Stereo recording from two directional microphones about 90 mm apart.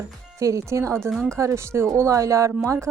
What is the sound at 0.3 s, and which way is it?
Speech, 35° right (ahead or behind).